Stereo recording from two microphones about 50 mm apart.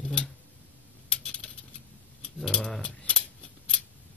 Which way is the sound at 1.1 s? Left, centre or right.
Centre.